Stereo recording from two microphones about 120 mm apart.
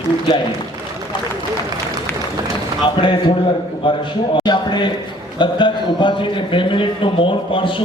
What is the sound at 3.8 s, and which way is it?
A man's voice, 45° left (ahead or behind).